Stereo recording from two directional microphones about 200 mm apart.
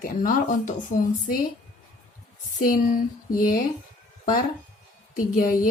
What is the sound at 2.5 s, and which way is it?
Speech, 45° left (ahead or behind).